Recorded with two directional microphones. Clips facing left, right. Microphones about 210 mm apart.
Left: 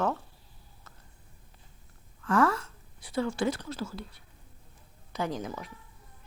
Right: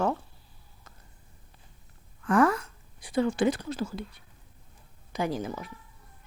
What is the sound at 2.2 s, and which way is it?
A woman's voice, 15° right (ahead or behind).